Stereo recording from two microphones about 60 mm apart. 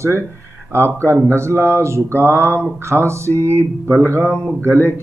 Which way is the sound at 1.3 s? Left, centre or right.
Right.